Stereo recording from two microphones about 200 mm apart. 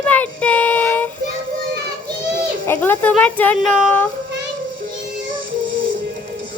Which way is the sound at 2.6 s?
10° left (ahead or behind).